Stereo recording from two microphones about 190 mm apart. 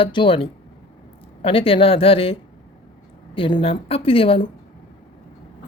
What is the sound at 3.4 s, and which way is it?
Speech, 25° left (ahead or behind).